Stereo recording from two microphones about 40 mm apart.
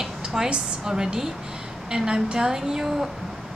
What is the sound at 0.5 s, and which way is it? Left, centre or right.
A woman's voice, centre.